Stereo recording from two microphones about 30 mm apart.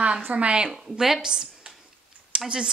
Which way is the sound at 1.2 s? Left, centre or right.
Right.